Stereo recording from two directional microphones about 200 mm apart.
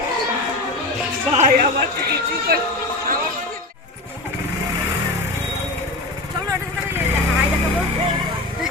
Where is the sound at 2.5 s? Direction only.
50° right (ahead or behind).